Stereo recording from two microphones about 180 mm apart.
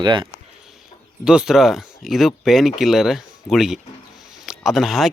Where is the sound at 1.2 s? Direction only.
5° right (ahead or behind).